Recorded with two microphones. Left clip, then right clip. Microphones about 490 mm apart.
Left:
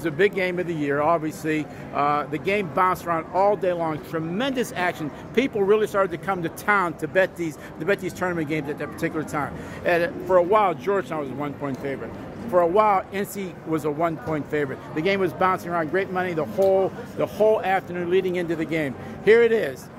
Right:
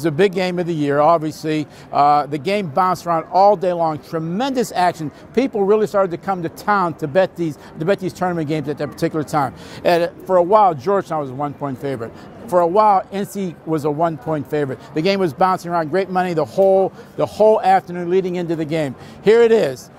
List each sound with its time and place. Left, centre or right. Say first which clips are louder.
0.0 s a man's voice: right 5 dB; right